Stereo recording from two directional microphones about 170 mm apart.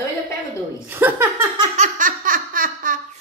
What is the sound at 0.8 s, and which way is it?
Speech, 15° right (ahead or behind).